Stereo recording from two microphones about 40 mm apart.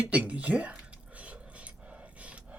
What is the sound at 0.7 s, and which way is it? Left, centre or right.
Dog, right.